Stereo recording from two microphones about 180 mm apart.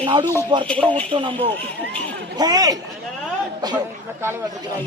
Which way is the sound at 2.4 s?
20° right (ahead or behind).